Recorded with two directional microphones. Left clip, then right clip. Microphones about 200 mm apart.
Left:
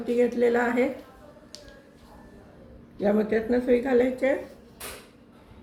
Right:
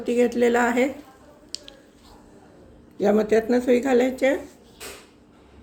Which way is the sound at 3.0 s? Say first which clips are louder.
Right 5 dB; 55° right (ahead or behind).